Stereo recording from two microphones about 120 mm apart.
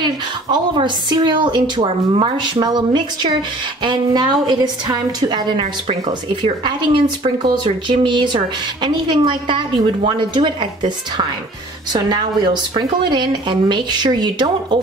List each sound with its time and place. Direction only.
0.0 s a woman's voice: 40° right (ahead or behind)
11.9 s a woman's voice: 35° right (ahead or behind)